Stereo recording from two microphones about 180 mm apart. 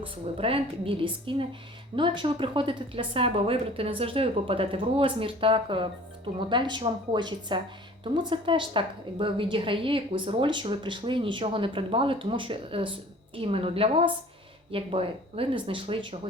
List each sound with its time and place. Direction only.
0.0 s a woman's voice: 30° right (ahead or behind)